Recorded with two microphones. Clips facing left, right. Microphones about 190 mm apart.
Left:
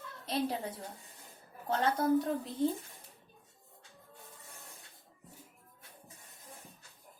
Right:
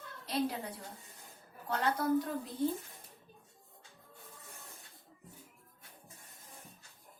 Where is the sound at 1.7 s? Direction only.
25° left (ahead or behind).